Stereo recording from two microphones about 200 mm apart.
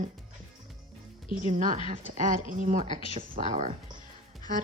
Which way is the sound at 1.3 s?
40° right (ahead or behind).